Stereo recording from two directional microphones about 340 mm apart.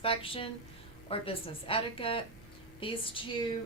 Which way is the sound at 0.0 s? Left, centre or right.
Centre.